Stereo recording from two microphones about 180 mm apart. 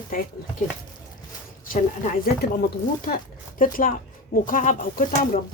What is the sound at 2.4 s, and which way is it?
Speech, 60° left (ahead or behind).